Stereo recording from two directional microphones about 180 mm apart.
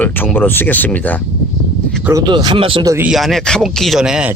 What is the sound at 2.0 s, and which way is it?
Speech, 15° right (ahead or behind).